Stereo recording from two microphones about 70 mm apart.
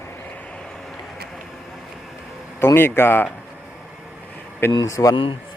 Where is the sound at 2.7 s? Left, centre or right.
Left.